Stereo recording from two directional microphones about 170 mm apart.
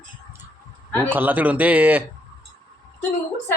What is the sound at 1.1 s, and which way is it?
Speech, 10° right (ahead or behind).